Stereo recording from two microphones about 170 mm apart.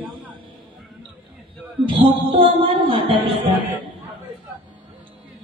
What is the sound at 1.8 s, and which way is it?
Speech, 30° right (ahead or behind).